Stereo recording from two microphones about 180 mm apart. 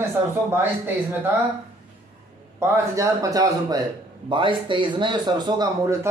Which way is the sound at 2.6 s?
15° right (ahead or behind).